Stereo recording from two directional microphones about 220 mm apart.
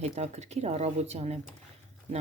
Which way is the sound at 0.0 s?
30° right (ahead or behind).